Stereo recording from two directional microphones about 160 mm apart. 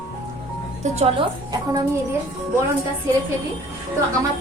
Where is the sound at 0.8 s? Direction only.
40° right (ahead or behind).